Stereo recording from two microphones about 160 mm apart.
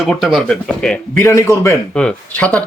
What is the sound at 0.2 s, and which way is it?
Speech, centre (ahead or behind).